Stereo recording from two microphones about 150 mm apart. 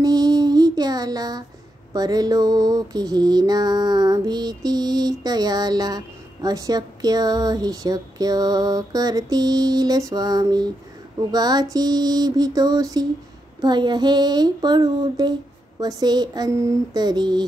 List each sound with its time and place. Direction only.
0.0 s mantra: 25° right (ahead or behind)
2.0 s music: 25° right (ahead or behind)